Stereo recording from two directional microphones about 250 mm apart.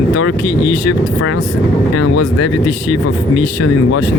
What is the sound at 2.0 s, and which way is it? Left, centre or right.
Speech, left.